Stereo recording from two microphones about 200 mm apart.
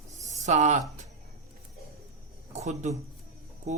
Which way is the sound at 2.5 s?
35° right (ahead or behind).